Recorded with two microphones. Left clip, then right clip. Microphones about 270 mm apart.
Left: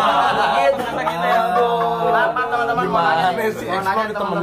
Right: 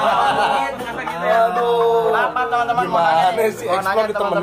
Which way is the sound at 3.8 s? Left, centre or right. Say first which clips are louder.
Right 1 dB; right.